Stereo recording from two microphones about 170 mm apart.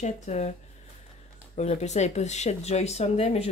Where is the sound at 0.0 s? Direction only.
40° left (ahead or behind).